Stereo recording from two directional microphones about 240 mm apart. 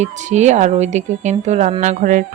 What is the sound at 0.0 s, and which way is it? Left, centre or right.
Speech, right.